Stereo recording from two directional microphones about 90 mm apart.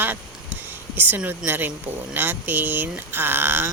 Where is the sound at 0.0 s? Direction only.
20° right (ahead or behind).